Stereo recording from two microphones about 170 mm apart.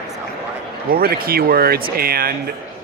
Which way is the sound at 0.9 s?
60° right (ahead or behind).